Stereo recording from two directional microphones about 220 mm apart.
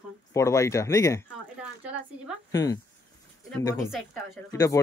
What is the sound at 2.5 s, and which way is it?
Speech, 15° left (ahead or behind).